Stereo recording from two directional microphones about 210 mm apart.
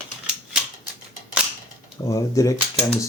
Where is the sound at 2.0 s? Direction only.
15° left (ahead or behind).